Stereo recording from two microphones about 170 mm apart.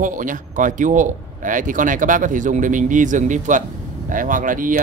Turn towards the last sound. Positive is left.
turn(degrees=-50)  # may be behind; listen again after turning